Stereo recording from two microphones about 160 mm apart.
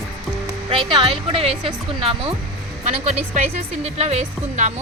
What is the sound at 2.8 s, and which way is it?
A woman's voice, 45° right (ahead or behind).